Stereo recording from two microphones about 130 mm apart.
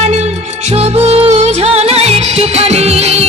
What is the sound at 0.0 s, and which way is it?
Music, 60° right (ahead or behind).